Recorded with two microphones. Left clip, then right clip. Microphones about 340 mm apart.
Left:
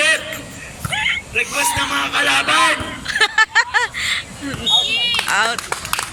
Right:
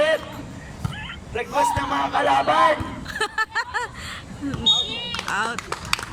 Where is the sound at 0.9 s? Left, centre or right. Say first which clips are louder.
Left 18 dB; centre.